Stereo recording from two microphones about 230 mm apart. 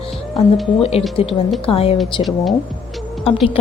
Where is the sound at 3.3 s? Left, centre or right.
Left.